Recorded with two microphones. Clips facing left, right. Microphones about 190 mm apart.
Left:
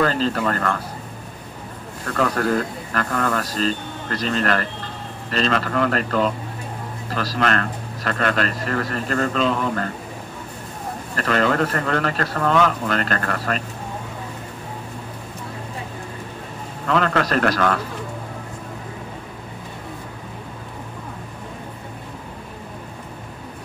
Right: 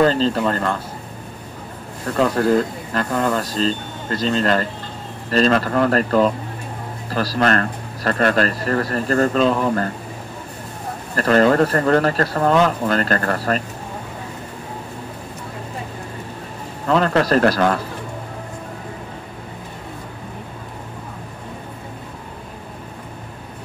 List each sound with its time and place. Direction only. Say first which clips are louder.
0.0 s speech: right 4 dB; 30° right (ahead or behind)
2.0 s speech: right 4 dB; 25° right (ahead or behind)
5.3 s a man's voice: right 5 dB; 40° right (ahead or behind)
11.1 s a man's voice: right 6 dB; 40° right (ahead or behind)
16.8 s a man's voice: right 3 dB; 35° right (ahead or behind)